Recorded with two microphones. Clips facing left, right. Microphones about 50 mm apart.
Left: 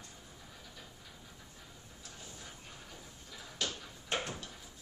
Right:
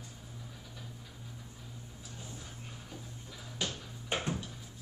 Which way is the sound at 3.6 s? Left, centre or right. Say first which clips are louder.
Right 1 dB; centre.